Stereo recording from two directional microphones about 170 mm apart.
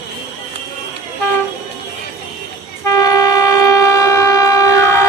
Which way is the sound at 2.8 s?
20° left (ahead or behind).